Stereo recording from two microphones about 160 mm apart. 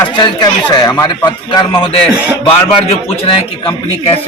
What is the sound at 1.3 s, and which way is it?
Speech, 30° left (ahead or behind).